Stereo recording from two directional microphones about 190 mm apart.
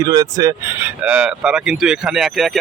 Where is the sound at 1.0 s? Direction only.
5° right (ahead or behind).